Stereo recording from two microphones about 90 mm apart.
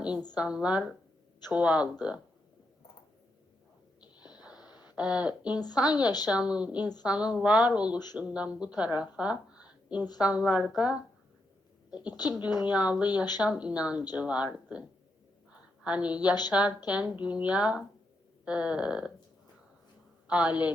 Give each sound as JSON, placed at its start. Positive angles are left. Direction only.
{"t": 0.3, "sound": "a woman's voice", "side_deg": -10}
{"t": 4.8, "sound": "speech", "side_deg": -15}
{"t": 5.5, "sound": "a woman's voice", "side_deg": 50}
{"t": 6.3, "sound": "a woman's voice", "side_deg": -10}
{"t": 7.9, "sound": "a woman's voice", "side_deg": 50}
{"t": 8.2, "sound": "a woman's voice", "side_deg": -10}
{"t": 12.2, "sound": "a woman's voice", "side_deg": 50}
{"t": 12.6, "sound": "a woman's voice", "side_deg": -15}
{"t": 20.2, "sound": "a woman's voice", "side_deg": -15}